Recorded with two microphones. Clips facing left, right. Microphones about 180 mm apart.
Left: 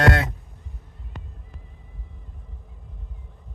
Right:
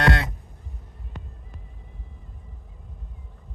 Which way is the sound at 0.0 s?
50° left (ahead or behind).